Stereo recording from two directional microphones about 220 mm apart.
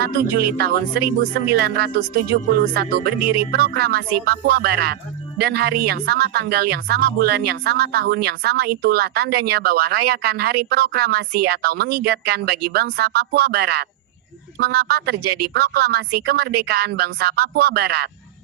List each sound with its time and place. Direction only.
0.0 s speech: 45° right (ahead or behind)